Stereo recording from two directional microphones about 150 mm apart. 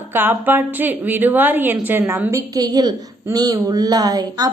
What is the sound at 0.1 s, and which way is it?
A woman's voice, 15° right (ahead or behind).